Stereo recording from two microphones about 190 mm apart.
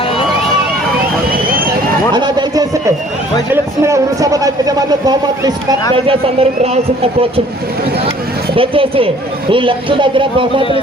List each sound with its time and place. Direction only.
2.1 s a sound: 20° right (ahead or behind)
3.5 s a man's voice: 15° right (ahead or behind); by 7.4 s 30° right (ahead or behind)
8.5 s a man's voice: 30° right (ahead or behind)